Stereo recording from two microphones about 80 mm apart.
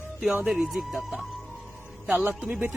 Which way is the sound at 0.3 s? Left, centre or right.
Centre.